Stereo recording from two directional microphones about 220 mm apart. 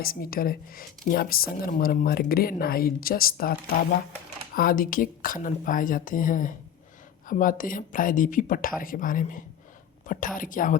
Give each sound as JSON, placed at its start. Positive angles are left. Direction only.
{"t": 0.0, "sound": "speech", "side_deg": 40}